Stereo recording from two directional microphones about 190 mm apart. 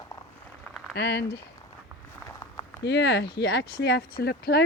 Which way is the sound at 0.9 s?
60° left (ahead or behind).